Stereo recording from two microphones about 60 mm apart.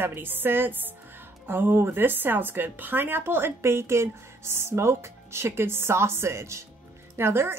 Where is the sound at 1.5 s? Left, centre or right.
Right.